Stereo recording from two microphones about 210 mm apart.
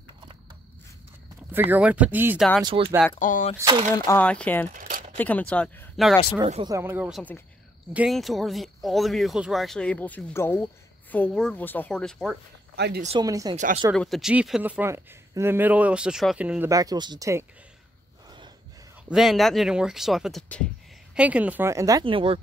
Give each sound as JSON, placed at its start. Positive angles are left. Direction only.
{"t": 1.5, "sound": "speech", "side_deg": -10}
{"t": 2.6, "sound": "speech", "side_deg": -25}
{"t": 3.2, "sound": "speech", "side_deg": 40}
{"t": 3.5, "sound": "speech", "side_deg": -20}
{"t": 3.9, "sound": "speech", "side_deg": 10}
{"t": 4.7, "sound": "a sound", "side_deg": -40}
{"t": 5.1, "sound": "speech", "side_deg": 5}
{"t": 6.4, "sound": "speech", "side_deg": -25}
{"t": 6.8, "sound": "speech", "side_deg": -10}
{"t": 12.7, "sound": "speech", "side_deg": -55}
{"t": 13.2, "sound": "speech", "side_deg": -15}
{"t": 13.6, "sound": "speech", "side_deg": -35}
{"t": 13.9, "sound": "speech", "side_deg": 0}
{"t": 19.0, "sound": "speech", "side_deg": 0}